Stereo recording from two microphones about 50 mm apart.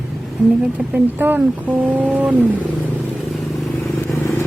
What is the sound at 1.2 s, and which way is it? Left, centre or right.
Speech, right.